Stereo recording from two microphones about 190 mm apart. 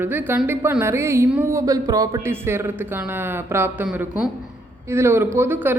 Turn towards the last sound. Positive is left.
turn(degrees=-10)  # may be behind; listen again after turning